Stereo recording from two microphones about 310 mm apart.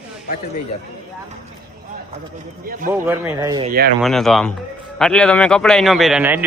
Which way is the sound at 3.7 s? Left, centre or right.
Right.